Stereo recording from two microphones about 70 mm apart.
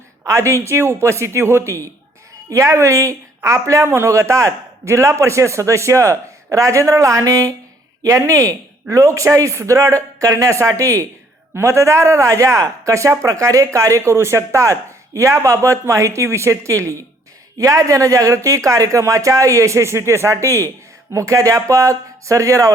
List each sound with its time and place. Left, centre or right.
0.3 s a man's voice: right
3.8 s a man's voice: right
4.1 s a man's voice: right
8.0 s a man's voice: right
11.5 s a man's voice: right